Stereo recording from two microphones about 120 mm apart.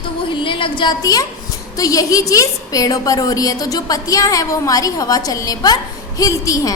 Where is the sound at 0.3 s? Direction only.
45° left (ahead or behind).